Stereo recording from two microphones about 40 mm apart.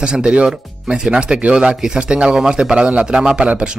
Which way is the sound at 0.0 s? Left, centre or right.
Right.